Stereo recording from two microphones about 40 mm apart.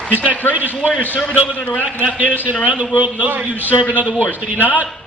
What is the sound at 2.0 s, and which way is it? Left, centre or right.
A man's voice, right.